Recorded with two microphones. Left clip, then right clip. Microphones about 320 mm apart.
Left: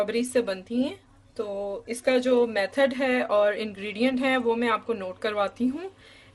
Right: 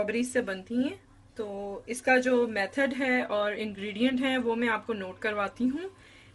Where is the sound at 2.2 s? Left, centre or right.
Centre.